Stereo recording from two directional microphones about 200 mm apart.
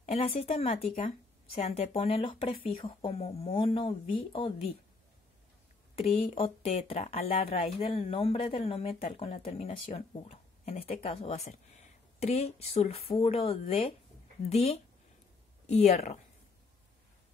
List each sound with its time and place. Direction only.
0.0 s a woman's voice: 30° left (ahead or behind)
5.9 s a woman's voice: 30° left (ahead or behind)